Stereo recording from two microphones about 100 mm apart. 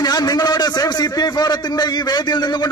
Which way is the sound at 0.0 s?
40° left (ahead or behind).